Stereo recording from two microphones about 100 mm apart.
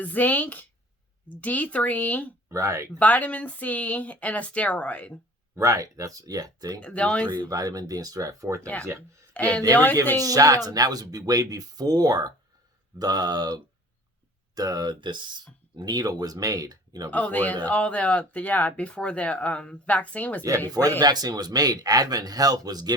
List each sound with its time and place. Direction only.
0.0 s speech: 15° left (ahead or behind)
2.5 s speech: 30° right (ahead or behind)
3.0 s speech: 15° left (ahead or behind)
5.5 s speech: 35° right (ahead or behind)
6.7 s speech: 10° left (ahead or behind)
7.3 s speech: 40° right (ahead or behind)
8.6 s speech: 10° left (ahead or behind)
10.2 s speech: 35° right (ahead or behind)
17.1 s speech: 15° left (ahead or behind)
21.0 s speech: 40° right (ahead or behind)